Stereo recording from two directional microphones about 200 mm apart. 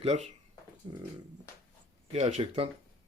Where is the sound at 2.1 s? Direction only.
30° right (ahead or behind).